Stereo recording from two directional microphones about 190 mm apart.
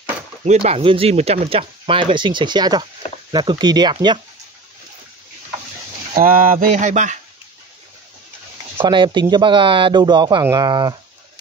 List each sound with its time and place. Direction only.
0.5 s speech: 30° right (ahead or behind)
6.1 s a sound: 50° right (ahead or behind)
8.8 s speech: 25° right (ahead or behind)